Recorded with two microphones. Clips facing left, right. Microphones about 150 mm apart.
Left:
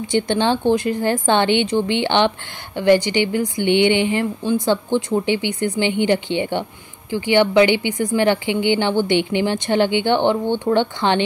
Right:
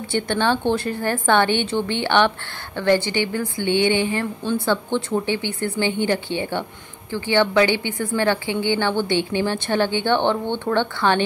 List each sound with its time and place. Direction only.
0.1 s a woman's voice: 20° left (ahead or behind)